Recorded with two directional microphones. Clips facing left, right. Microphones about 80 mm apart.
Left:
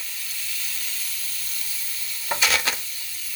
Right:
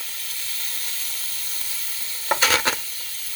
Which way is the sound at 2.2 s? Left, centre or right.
Right.